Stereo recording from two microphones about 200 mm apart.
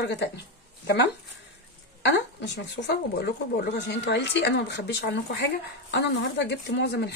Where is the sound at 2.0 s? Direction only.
60° left (ahead or behind).